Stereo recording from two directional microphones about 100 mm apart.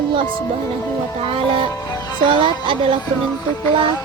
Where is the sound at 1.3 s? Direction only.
60° right (ahead or behind).